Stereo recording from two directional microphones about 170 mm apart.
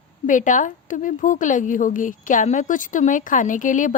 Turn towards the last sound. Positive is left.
turn(degrees=50)  # may be behind; listen again after turning